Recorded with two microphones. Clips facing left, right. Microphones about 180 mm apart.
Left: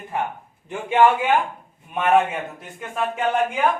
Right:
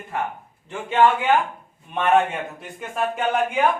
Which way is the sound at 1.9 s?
5° left (ahead or behind).